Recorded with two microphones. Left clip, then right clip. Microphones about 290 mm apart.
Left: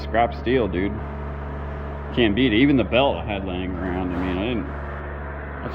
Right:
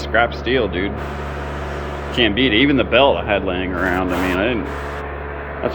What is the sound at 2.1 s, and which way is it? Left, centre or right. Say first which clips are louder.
Speech: right 4 dB; centre.